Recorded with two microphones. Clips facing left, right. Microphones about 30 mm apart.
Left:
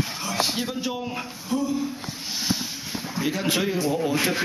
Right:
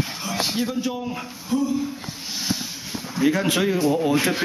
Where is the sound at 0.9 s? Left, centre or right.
Centre.